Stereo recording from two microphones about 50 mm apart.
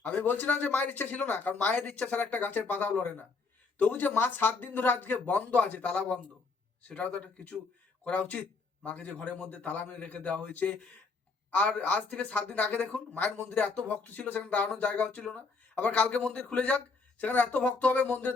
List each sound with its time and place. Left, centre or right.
0.1 s a man's voice: left